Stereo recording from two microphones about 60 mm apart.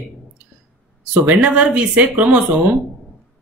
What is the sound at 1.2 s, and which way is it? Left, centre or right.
Speech, right.